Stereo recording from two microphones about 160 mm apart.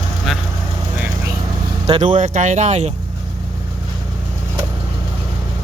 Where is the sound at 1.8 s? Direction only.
30° right (ahead or behind).